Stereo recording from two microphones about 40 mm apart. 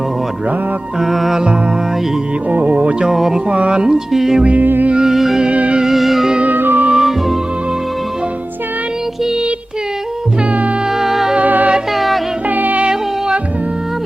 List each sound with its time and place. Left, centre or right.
1.0 s music: centre
2.5 s speech: right
3.0 s music: centre
3.5 s speech: right
4.1 s music: centre
4.6 s music: right
4.9 s music: centre
6.4 s music: right
6.9 s music: centre
10.9 s music: centre
11.3 s music: right
11.9 s a sound: centre
12.5 s music: right
12.9 s music: centre